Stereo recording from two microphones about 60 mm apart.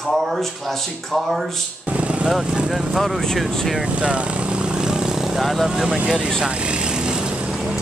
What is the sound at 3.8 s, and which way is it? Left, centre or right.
Vehicle, centre.